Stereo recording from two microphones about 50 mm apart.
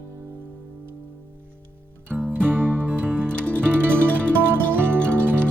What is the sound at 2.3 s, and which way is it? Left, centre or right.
Music, right.